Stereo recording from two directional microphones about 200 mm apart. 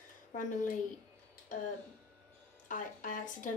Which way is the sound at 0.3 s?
40° left (ahead or behind).